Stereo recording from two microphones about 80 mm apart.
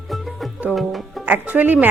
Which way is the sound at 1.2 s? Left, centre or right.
Right.